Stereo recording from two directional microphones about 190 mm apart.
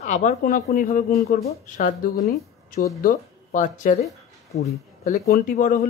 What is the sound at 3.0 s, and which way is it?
Speech, 40° left (ahead or behind).